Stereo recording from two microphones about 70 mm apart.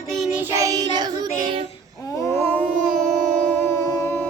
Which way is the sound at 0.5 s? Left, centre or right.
Right.